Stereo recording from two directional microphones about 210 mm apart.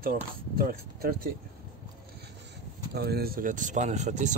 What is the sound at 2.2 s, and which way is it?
Speech, 50° right (ahead or behind).